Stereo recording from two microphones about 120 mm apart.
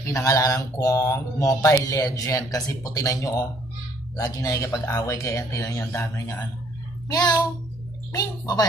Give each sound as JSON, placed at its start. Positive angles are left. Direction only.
{"t": 0.0, "sound": "mantra", "side_deg": 25}
{"t": 7.1, "sound": "a woman's voice", "side_deg": 35}